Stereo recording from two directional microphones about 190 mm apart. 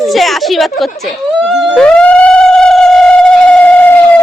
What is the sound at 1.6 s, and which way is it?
Theremin, 5° left (ahead or behind).